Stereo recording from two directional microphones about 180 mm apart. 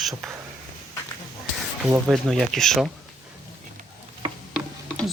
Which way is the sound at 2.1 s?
Centre (ahead or behind).